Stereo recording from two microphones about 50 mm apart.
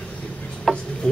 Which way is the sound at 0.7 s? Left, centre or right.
Centre.